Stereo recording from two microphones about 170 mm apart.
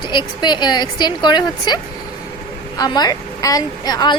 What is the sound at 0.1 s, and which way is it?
A woman's voice, 25° left (ahead or behind).